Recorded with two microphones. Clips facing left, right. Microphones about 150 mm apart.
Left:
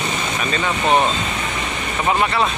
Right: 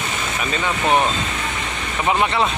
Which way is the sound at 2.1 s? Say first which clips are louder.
Even; 20° right (ahead or behind).